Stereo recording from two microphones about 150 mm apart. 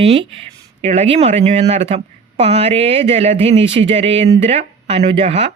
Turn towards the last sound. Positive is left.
turn(degrees=-40)  # may be behind; listen again after turning